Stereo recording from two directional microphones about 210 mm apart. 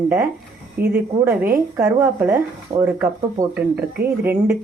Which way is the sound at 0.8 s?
50° right (ahead or behind).